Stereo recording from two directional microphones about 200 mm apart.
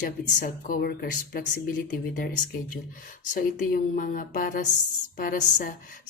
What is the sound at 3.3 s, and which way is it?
Mantra, 45° left (ahead or behind).